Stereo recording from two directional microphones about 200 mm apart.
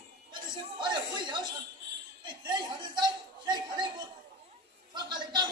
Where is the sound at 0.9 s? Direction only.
20° right (ahead or behind).